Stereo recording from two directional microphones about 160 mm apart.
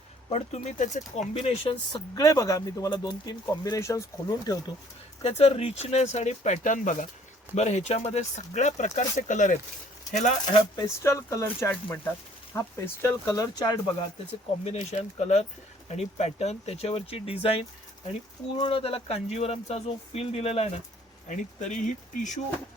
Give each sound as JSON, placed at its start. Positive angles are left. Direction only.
{"t": 0.3, "sound": "speech", "side_deg": 40}
{"t": 5.2, "sound": "speech", "side_deg": 40}
{"t": 10.8, "sound": "speech", "side_deg": 15}
{"t": 14.6, "sound": "speech", "side_deg": 45}
{"t": 21.2, "sound": "speech", "side_deg": 50}